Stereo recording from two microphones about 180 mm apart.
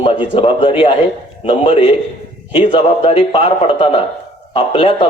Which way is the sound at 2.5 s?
30° left (ahead or behind).